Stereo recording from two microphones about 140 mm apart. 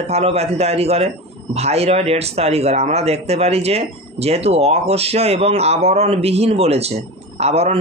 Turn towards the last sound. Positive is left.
turn(degrees=-50)  # may be behind; listen again after turning